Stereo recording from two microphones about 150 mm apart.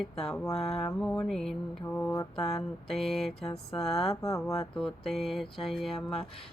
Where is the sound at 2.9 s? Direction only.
Centre (ahead or behind).